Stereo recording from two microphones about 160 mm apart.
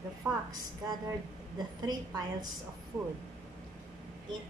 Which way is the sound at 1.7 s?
25° right (ahead or behind).